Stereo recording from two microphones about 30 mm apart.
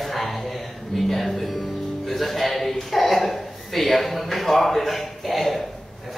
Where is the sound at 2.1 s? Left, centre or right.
Centre.